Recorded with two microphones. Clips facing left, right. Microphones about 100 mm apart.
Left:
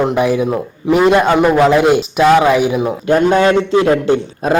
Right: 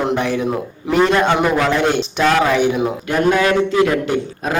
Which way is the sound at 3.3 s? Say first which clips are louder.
Even; 30° left (ahead or behind).